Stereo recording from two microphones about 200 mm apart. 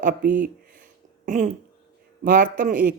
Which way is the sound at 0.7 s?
40° right (ahead or behind).